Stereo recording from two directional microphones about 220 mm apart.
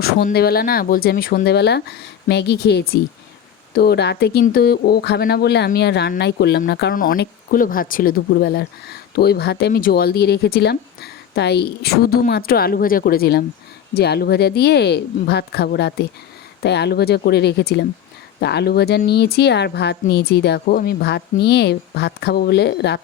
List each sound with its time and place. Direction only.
0.0 s speech: 45° left (ahead or behind)